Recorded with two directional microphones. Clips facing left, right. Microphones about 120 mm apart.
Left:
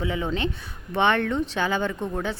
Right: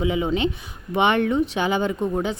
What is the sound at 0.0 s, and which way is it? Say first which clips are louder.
Speech: right 5 dB; 15° right (ahead or behind).